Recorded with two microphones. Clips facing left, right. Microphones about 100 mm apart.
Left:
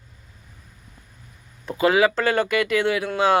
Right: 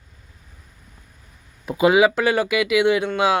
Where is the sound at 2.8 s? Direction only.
20° right (ahead or behind).